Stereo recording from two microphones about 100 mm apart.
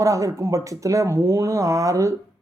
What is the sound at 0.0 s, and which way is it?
Speech, 35° right (ahead or behind).